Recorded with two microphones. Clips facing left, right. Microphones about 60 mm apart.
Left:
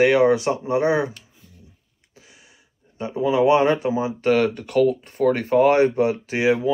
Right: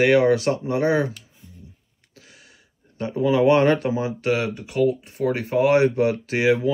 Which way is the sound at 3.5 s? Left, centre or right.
Centre.